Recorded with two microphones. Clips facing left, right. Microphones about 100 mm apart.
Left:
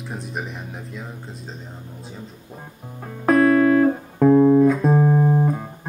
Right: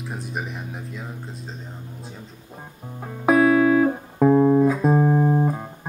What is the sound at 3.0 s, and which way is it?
Music, 5° right (ahead or behind).